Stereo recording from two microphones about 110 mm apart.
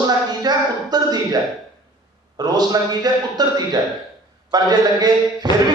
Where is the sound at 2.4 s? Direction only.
40° right (ahead or behind).